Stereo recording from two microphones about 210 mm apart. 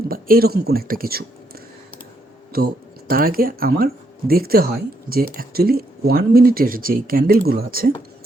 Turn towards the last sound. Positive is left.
turn(degrees=-45)  # may be behind; listen again after turning